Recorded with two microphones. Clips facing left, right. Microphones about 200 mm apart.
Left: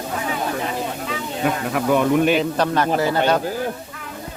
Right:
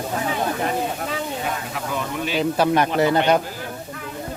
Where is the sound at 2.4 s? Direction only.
10° right (ahead or behind).